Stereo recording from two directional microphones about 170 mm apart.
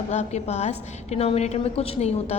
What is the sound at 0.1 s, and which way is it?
A woman's voice, 40° left (ahead or behind).